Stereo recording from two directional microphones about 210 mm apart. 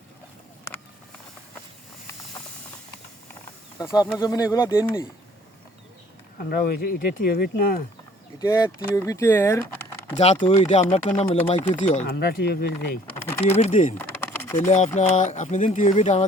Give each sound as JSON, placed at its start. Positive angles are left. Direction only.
{"t": 3.8, "sound": "speech", "side_deg": 20}
{"t": 6.4, "sound": "speech", "side_deg": 45}
{"t": 8.4, "sound": "speech", "side_deg": 15}
{"t": 10.4, "sound": "speech", "side_deg": 30}
{"t": 12.0, "sound": "speech", "side_deg": 50}
{"t": 13.4, "sound": "speech", "side_deg": 30}
{"t": 14.2, "sound": "typing", "side_deg": 10}
{"t": 14.5, "sound": "speech", "side_deg": 35}